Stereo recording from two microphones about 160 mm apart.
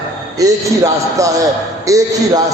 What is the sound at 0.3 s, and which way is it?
A man's voice, 20° right (ahead or behind).